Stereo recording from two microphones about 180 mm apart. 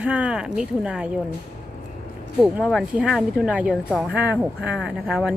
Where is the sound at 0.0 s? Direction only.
5° right (ahead or behind).